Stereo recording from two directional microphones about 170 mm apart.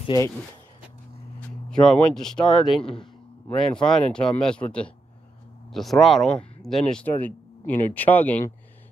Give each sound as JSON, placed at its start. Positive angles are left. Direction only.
{"t": 0.0, "sound": "speech", "side_deg": 25}
{"t": 1.7, "sound": "speech", "side_deg": 5}
{"t": 2.8, "sound": "speech", "side_deg": 35}
{"t": 3.4, "sound": "speech", "side_deg": 5}